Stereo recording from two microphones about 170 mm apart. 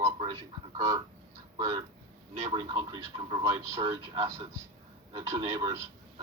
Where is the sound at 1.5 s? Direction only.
25° right (ahead or behind).